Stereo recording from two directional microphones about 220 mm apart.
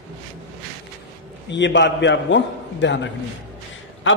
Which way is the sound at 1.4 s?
55° left (ahead or behind).